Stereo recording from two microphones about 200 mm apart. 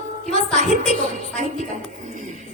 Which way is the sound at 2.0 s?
40° right (ahead or behind).